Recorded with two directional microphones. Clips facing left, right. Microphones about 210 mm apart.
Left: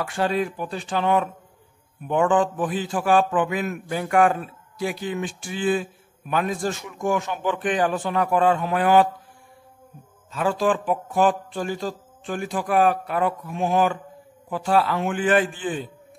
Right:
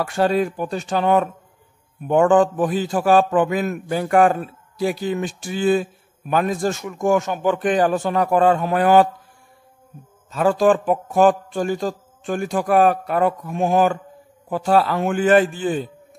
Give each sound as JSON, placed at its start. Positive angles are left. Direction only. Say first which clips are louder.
{"t": 0.0, "sound": "a man's voice", "louder": "right 5 dB", "side_deg": -40}
{"t": 10.3, "sound": "a man's voice", "louder": "right 6 dB", "side_deg": -45}